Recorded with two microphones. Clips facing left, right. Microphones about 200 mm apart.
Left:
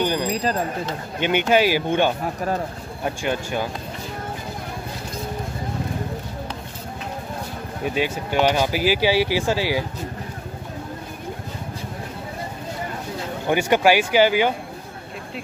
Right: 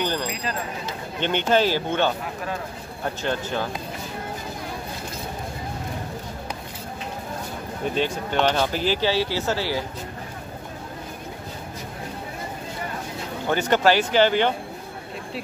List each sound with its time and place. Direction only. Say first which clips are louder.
0.0 s speech: left 4 dB; 15° left (ahead or behind)
0.3 s speech: left 7 dB; 40° left (ahead or behind)
1.2 s speech: left 2 dB; 10° left (ahead or behind)
3.2 s speech: left 1 dB; 10° left (ahead or behind)
7.8 s speech: left 1 dB; 10° left (ahead or behind)
13.5 s speech: left 2 dB; 10° left (ahead or behind)